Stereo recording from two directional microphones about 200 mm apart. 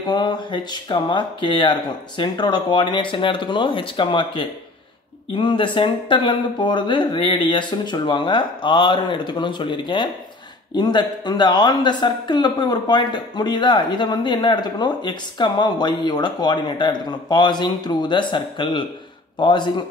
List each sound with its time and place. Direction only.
0.0 s speech: 20° left (ahead or behind)